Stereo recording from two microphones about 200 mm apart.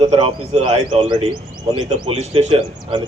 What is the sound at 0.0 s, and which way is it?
Speech, 30° right (ahead or behind).